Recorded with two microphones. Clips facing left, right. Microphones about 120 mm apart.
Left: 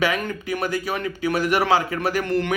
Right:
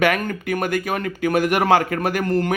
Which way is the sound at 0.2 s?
45° right (ahead or behind).